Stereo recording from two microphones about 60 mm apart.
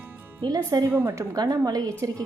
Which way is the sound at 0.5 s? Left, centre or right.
Right.